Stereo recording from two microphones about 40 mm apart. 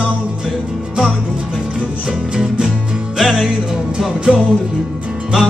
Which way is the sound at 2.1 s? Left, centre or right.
Centre.